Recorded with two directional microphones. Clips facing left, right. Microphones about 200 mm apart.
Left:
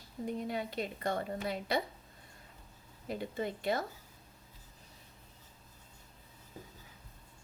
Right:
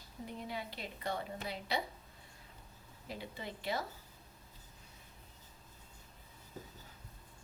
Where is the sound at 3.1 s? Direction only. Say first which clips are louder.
Left 8 dB; 50° left (ahead or behind).